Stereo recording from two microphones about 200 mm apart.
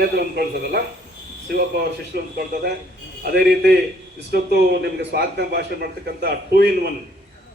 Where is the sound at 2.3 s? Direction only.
50° right (ahead or behind).